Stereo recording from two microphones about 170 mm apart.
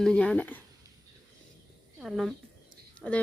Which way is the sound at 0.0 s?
5° left (ahead or behind).